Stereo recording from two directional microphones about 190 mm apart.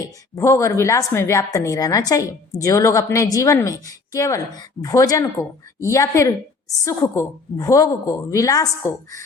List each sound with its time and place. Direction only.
0.0 s a woman's voice: 15° left (ahead or behind)